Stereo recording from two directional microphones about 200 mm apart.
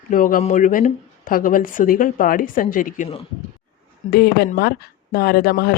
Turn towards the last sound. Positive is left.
turn(degrees=50)  # may be behind; listen again after turning